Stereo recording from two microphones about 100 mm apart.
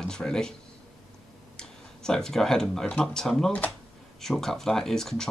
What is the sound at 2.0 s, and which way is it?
Speech, 5° left (ahead or behind).